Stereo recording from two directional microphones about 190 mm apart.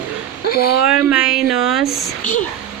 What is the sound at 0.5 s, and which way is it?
Speech, 55° left (ahead or behind).